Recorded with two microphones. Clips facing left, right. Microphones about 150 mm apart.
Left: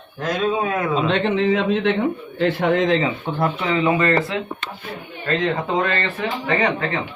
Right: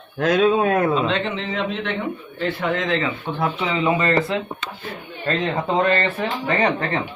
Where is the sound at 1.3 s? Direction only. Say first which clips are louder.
Left 7 dB; 55° left (ahead or behind).